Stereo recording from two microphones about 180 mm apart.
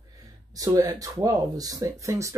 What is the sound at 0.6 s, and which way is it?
Speech, 20° right (ahead or behind).